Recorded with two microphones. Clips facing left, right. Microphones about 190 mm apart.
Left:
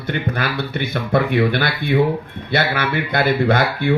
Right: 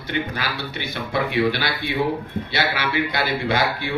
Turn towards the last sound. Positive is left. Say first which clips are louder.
# left 5 dB
turn(degrees=55)  # may be behind; listen again after turning